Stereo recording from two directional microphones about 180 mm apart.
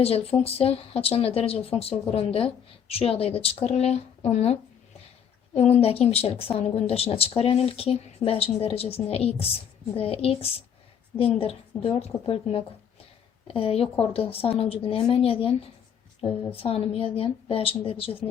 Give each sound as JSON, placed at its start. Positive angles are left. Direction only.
{"t": 0.0, "sound": "speech", "side_deg": 35}
{"t": 5.5, "sound": "speech", "side_deg": 35}